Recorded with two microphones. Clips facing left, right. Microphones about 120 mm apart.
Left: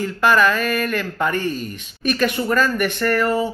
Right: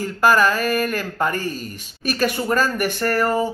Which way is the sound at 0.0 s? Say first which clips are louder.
Even; 40° right (ahead or behind).